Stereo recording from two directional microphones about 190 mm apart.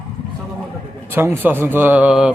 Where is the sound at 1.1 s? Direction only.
10° right (ahead or behind).